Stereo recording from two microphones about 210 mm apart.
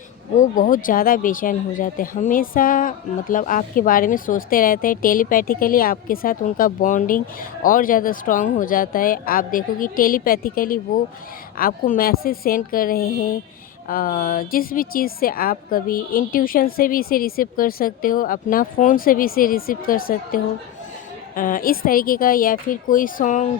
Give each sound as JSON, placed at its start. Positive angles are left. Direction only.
{"t": 0.3, "sound": "a woman's voice", "side_deg": 40}